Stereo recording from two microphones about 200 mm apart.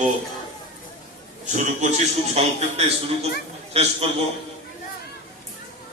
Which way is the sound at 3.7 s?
30° right (ahead or behind).